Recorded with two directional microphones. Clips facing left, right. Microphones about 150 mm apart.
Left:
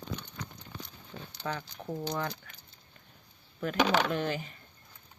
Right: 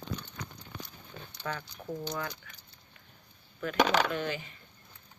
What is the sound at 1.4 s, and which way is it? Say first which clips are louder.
Speech: left 1 dB; 20° left (ahead or behind).